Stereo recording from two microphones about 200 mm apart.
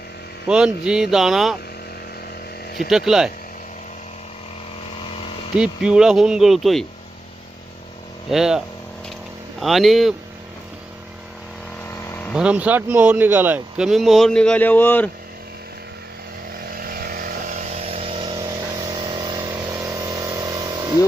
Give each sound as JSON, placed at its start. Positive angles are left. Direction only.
{"t": 0.4, "sound": "speech", "side_deg": -5}
{"t": 2.9, "sound": "speech", "side_deg": 0}
{"t": 5.5, "sound": "speech", "side_deg": -5}
{"t": 8.3, "sound": "speech", "side_deg": 0}
{"t": 12.0, "sound": "vehicle", "side_deg": 10}
{"t": 12.3, "sound": "speech", "side_deg": -5}
{"t": 16.6, "sound": "vehicle", "side_deg": -45}